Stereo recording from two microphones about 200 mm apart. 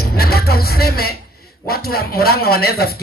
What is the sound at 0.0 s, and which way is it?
Music, 50° left (ahead or behind).